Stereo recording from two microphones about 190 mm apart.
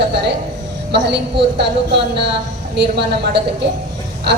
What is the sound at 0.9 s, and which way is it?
A woman's voice, 65° right (ahead or behind).